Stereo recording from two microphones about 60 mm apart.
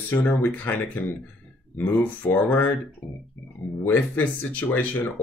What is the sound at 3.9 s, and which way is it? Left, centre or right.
Speech, left.